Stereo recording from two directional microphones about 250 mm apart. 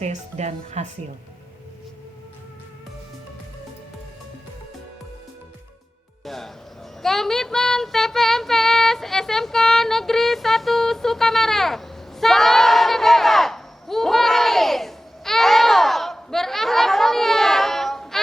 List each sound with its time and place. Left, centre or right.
0.0 s speech: right
6.2 s music: centre
7.0 s child singing: centre